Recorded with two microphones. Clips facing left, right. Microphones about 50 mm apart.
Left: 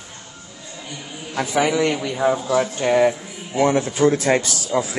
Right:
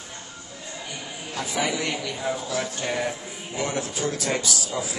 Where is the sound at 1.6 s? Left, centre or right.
Left.